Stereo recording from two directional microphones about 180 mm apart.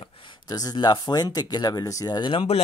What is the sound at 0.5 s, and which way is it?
Speech, 20° left (ahead or behind).